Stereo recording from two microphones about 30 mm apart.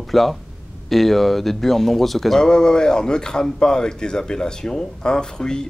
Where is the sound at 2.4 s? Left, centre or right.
Left.